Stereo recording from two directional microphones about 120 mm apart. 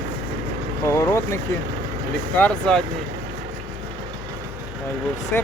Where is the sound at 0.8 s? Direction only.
25° left (ahead or behind).